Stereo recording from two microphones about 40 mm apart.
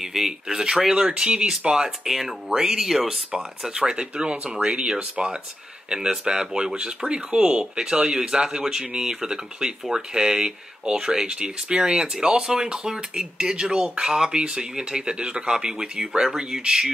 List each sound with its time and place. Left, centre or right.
0.1 s speech: centre
2.0 s speech: centre